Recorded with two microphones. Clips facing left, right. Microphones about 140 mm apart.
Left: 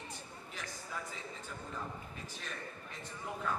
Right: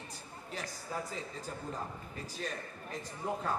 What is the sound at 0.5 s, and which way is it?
A man's voice, 35° right (ahead or behind).